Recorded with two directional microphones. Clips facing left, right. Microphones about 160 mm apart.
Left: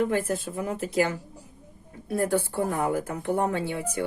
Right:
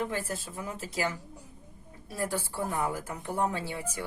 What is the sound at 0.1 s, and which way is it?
A woman's voice, 55° left (ahead or behind).